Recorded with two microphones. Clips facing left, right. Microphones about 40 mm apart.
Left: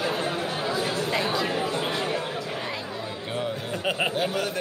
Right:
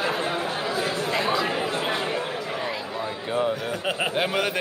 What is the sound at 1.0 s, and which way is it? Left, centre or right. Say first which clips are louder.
Speech: right 2 dB; centre.